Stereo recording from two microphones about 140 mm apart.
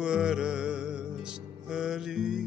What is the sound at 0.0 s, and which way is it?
Music, 5° right (ahead or behind).